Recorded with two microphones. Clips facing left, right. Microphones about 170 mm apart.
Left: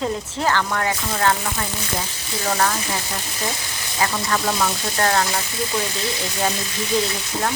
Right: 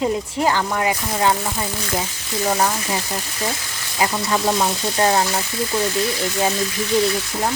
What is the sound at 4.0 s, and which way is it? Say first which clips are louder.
Speech: right 2 dB; 15° right (ahead or behind).